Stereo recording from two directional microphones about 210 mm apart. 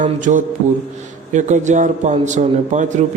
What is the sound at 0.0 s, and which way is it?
A man's voice, 40° right (ahead or behind).